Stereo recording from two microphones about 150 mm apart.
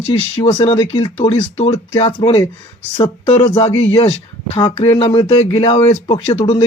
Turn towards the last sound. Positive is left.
turn(degrees=35)  # may be behind; listen again after turning